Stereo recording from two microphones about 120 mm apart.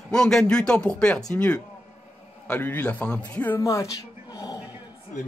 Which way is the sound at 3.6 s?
25° left (ahead or behind).